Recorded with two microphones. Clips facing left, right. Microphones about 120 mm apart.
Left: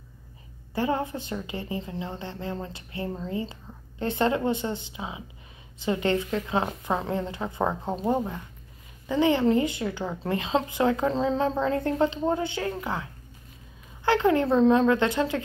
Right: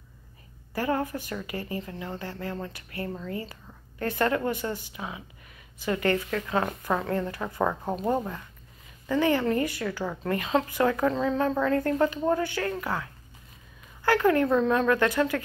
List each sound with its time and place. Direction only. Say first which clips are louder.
0.7 s a woman's voice: left 1 dB; 20° left (ahead or behind)